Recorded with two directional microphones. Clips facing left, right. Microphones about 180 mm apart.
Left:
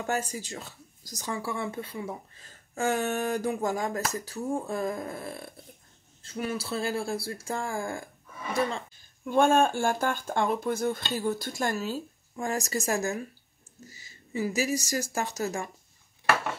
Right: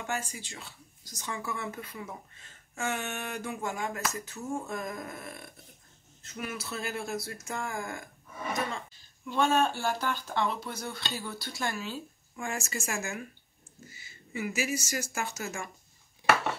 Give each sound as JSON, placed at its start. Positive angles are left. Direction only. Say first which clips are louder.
{"t": 0.0, "sound": "speech", "louder": "left 5 dB", "side_deg": 40}
{"t": 9.2, "sound": "speech", "louder": "left 5 dB", "side_deg": 50}